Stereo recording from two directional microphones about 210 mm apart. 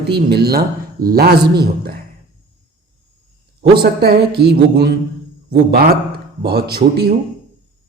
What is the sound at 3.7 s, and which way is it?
Speech, 50° right (ahead or behind).